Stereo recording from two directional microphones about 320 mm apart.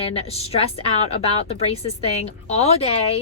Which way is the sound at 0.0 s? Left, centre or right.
Centre.